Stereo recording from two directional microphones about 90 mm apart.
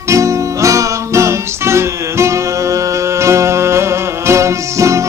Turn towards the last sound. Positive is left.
turn(degrees=-35)  # may be behind; listen again after turning